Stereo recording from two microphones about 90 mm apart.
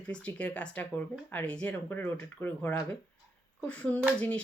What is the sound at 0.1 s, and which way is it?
Speech, 15° left (ahead or behind).